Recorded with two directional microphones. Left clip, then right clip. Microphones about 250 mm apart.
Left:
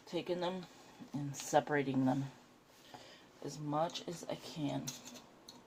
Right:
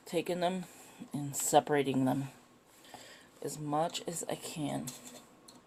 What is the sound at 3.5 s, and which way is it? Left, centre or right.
Speech, right.